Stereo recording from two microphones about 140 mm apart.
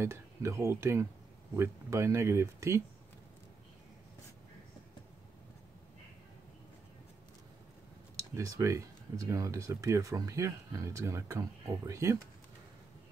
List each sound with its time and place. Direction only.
0.0 s speech: 20° right (ahead or behind)
8.4 s speech: 20° right (ahead or behind)